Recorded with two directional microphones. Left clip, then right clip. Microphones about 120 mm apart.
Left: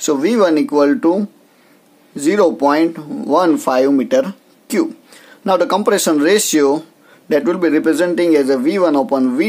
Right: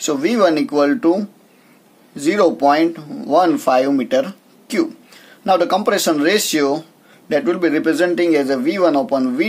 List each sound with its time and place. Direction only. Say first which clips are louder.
0.0 s speech: left 2 dB; 40° left (ahead or behind)